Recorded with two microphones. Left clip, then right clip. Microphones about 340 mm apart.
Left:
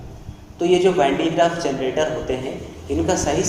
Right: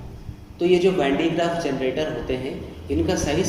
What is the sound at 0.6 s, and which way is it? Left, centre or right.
A woman's voice, left.